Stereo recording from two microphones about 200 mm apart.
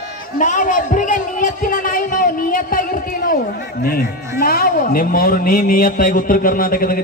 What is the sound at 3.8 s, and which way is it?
A man's voice, 45° left (ahead or behind).